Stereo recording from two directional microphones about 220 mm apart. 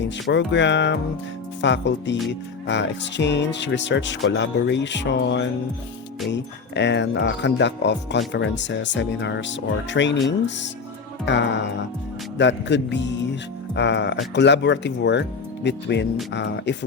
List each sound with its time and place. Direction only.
0.0 s speech: 55° left (ahead or behind)